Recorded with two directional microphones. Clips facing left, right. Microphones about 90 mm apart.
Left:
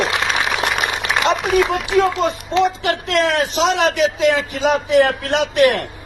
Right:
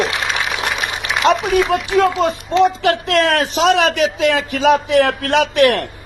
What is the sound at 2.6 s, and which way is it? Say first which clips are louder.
A man's voice: right 3 dB; 50° right (ahead or behind).